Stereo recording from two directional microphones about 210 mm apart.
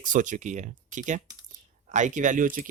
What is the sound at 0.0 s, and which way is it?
Speech, 40° right (ahead or behind).